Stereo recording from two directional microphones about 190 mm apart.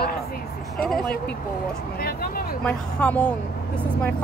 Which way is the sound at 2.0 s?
50° left (ahead or behind).